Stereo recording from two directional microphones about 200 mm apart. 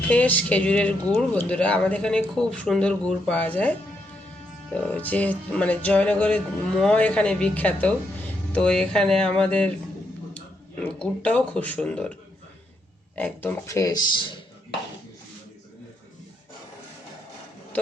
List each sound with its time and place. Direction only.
0.1 s music: 5° left (ahead or behind)
1.1 s speech: 5° left (ahead or behind)
4.7 s music: 5° left (ahead or behind)
8.5 s speech: 5° left (ahead or behind)
13.1 s music: 10° left (ahead or behind)